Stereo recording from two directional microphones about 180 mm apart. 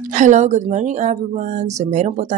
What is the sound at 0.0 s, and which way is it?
Speech, 45° right (ahead or behind).